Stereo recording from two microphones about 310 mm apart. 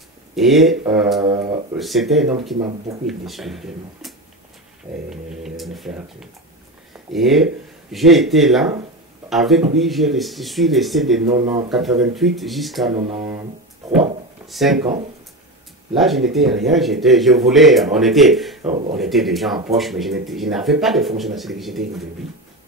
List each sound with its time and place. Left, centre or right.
0.4 s speech: centre
5.1 s speech: centre
11.3 s speech: centre
11.7 s speech: centre
12.9 s speech: centre
14.5 s speech: centre
15.9 s speech: centre
18.7 s speech: right
18.9 s speech: centre